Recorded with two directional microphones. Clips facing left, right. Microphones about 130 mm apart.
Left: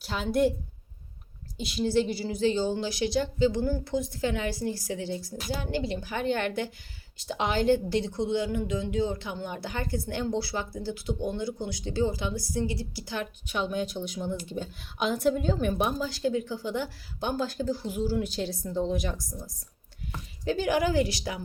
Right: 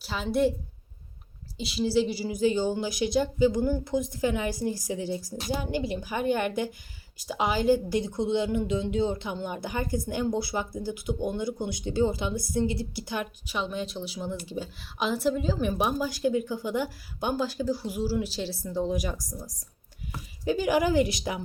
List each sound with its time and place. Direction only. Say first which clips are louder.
0.0 s a woman's voice: even; centre (ahead or behind)
1.5 s a woman's voice: right 1 dB; centre (ahead or behind)
13.6 s a woman's voice: left 2 dB; centre (ahead or behind)
20.1 s a woman's voice: right 1 dB; 10° right (ahead or behind)